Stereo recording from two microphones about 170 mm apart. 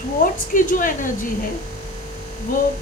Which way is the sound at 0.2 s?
55° left (ahead or behind).